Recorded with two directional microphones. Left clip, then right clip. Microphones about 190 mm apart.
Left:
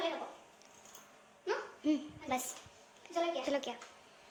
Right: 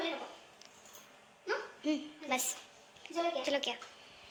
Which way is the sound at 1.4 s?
15° left (ahead or behind).